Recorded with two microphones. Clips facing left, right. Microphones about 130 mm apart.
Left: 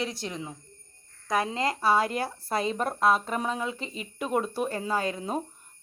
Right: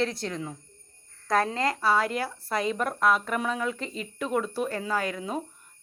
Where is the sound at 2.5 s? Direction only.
30° left (ahead or behind).